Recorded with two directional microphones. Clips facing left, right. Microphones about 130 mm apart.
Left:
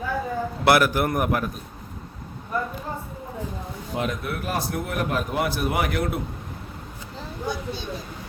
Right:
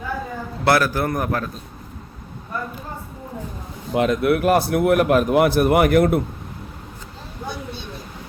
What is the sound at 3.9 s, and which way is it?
A man's voice, 80° right.